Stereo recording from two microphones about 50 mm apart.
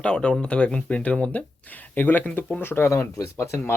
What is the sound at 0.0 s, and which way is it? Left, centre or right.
Speech, centre.